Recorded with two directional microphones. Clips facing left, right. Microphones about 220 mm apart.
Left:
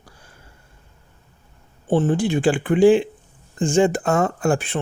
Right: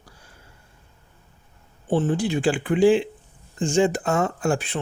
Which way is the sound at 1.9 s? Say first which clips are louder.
Left 3 dB; 50° left (ahead or behind).